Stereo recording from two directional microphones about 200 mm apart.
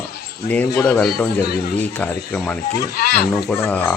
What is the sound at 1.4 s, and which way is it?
Speech, 50° left (ahead or behind).